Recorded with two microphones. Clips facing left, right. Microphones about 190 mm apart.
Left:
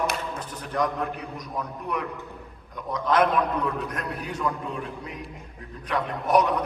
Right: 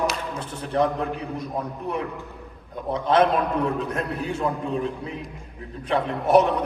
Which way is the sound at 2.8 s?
25° right (ahead or behind).